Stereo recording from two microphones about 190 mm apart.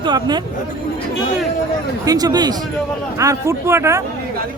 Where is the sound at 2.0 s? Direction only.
20° right (ahead or behind).